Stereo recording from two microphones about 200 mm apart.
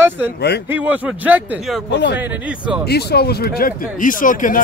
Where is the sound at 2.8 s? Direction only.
55° left (ahead or behind).